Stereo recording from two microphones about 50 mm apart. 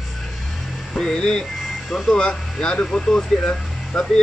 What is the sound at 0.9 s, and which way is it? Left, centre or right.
Speech, centre.